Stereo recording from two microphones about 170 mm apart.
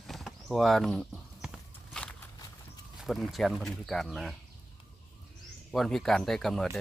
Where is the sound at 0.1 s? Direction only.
Centre (ahead or behind).